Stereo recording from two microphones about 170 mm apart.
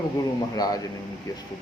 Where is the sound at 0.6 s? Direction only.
25° left (ahead or behind).